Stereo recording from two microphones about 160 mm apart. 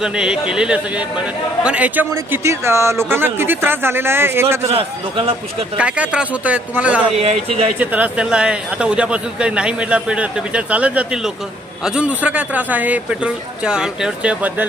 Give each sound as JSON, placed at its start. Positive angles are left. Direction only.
{"t": 0.0, "sound": "speech", "side_deg": -5}
{"t": 4.7, "sound": "speech", "side_deg": -35}
{"t": 5.7, "sound": "speech", "side_deg": -10}
{"t": 7.2, "sound": "speech", "side_deg": -40}
{"t": 7.8, "sound": "speech", "side_deg": -10}